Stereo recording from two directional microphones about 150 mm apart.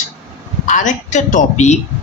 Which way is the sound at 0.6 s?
55° left (ahead or behind).